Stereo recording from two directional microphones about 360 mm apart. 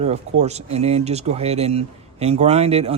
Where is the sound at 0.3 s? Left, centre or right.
Centre.